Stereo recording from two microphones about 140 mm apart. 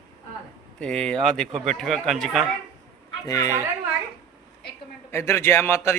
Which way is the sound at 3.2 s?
25° left (ahead or behind).